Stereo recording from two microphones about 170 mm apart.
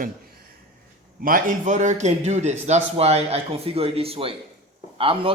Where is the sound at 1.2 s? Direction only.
55° right (ahead or behind).